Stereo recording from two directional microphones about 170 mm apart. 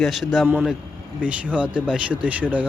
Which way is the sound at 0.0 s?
Centre (ahead or behind).